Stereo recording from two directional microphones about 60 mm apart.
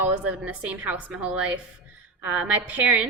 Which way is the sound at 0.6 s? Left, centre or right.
Right.